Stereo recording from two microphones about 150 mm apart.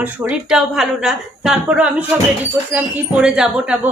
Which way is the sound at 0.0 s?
10° right (ahead or behind).